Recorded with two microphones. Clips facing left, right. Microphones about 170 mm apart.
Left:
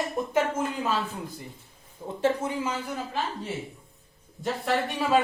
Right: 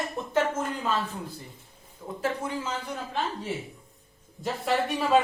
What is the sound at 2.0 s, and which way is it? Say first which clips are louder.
Speech: left 2 dB; 30° left (ahead or behind).